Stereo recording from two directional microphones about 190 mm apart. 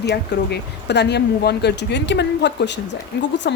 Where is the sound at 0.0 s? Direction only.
60° left (ahead or behind).